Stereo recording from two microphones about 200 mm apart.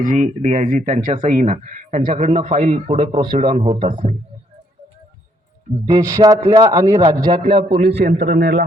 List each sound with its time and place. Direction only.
0.0 s speech: 40° right (ahead or behind)
5.9 s a man's voice: 15° right (ahead or behind)
8.1 s speech: 35° right (ahead or behind)
8.4 s a man's voice: 60° right (ahead or behind)